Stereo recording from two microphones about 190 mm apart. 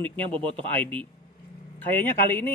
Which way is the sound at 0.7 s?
10° left (ahead or behind).